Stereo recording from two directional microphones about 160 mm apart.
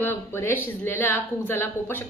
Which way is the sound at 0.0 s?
15° left (ahead or behind).